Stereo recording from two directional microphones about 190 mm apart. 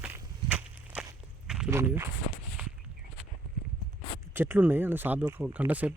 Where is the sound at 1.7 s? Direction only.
15° right (ahead or behind).